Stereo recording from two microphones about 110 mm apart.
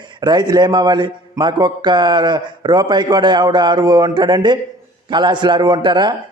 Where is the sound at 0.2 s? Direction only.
40° right (ahead or behind).